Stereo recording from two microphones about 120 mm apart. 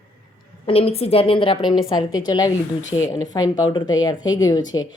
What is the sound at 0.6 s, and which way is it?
A woman's voice, 55° left (ahead or behind).